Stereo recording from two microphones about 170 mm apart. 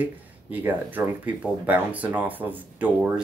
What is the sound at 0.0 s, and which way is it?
Speech, 10° right (ahead or behind).